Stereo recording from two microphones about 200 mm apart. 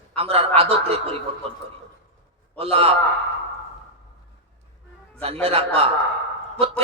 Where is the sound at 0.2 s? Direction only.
30° right (ahead or behind).